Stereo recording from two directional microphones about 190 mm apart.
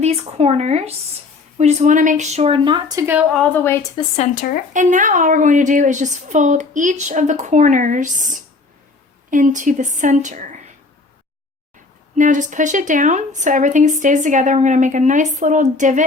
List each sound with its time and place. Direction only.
0.0 s speech: 35° right (ahead or behind)
3.3 s a woman's voice: 5° left (ahead or behind)
4.2 s speech: 45° left (ahead or behind)
4.7 s speech: 40° right (ahead or behind)
12.1 s speech: 40° right (ahead or behind)